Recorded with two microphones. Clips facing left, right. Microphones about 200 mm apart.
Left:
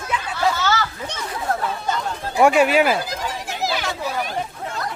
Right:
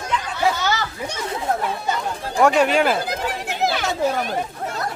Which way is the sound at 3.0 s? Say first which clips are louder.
Right 3 dB; 60° right (ahead or behind).